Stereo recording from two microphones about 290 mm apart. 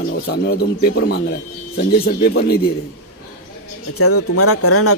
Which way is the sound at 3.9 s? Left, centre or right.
Left.